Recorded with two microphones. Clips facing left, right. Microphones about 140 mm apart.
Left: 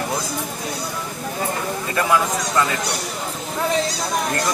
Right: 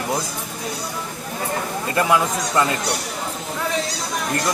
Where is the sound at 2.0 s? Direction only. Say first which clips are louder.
Right 1 dB; 20° right (ahead or behind).